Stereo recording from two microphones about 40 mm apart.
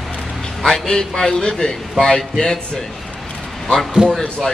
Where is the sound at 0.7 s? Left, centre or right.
Centre.